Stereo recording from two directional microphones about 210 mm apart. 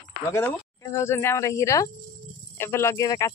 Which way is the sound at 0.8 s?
15° left (ahead or behind).